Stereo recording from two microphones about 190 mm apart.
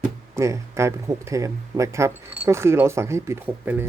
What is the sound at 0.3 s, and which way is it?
Speech, 15° right (ahead or behind).